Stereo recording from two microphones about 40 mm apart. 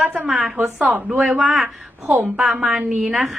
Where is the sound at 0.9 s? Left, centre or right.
Right.